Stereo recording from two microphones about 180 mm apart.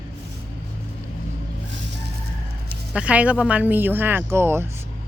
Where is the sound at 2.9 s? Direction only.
5° right (ahead or behind).